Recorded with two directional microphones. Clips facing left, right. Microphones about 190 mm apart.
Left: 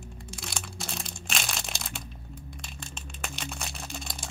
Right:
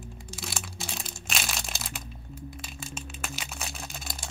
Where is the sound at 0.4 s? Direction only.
Centre (ahead or behind).